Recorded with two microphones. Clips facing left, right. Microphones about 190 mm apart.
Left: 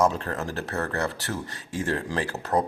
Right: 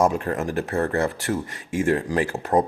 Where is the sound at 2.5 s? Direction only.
25° right (ahead or behind).